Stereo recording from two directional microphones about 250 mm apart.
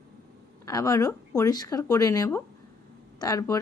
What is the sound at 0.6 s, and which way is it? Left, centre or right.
Speech, centre.